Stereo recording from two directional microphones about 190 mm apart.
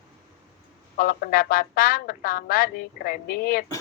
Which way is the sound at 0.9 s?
50° left (ahead or behind).